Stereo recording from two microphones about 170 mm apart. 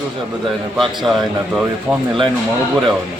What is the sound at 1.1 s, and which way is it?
Speech, 25° right (ahead or behind).